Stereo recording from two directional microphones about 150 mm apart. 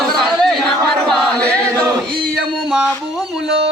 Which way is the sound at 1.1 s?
5° left (ahead or behind).